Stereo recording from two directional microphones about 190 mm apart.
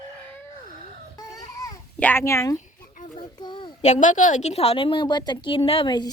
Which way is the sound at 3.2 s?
25° left (ahead or behind).